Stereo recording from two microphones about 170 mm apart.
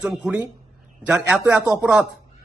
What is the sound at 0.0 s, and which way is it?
A man's voice, 5° right (ahead or behind).